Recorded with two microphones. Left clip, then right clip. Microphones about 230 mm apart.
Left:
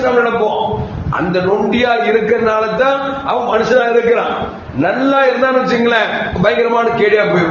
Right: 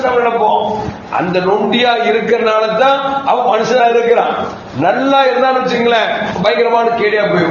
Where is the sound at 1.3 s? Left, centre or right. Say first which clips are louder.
Right 1 dB; left.